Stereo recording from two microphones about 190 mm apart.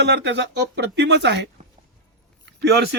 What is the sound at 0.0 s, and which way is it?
Speech, 65° right (ahead or behind).